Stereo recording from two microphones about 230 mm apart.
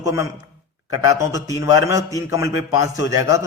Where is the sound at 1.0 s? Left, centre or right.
Centre.